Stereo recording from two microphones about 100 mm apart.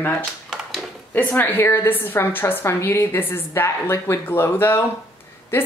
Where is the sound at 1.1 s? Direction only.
15° left (ahead or behind).